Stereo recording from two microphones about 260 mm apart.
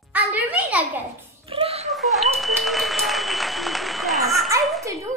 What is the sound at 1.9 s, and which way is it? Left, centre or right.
Applause, centre.